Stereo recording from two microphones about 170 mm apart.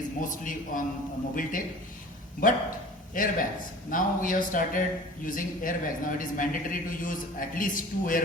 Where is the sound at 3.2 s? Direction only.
55° left (ahead or behind).